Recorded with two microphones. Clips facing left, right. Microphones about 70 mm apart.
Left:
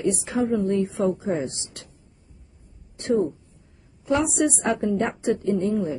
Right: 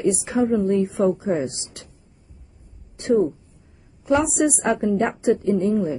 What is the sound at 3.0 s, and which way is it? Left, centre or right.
A woman's voice, centre.